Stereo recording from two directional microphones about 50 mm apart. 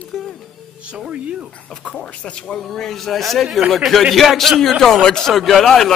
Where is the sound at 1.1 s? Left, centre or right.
Right.